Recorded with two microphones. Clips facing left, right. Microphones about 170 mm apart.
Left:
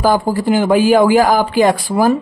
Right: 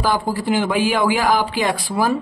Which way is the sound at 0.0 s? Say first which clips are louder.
Left 6 dB; 45° left (ahead or behind).